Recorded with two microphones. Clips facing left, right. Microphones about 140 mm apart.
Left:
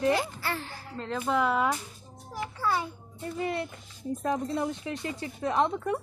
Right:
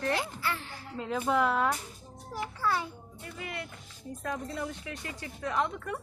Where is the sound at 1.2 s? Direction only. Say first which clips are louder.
Left 1 dB; centre (ahead or behind).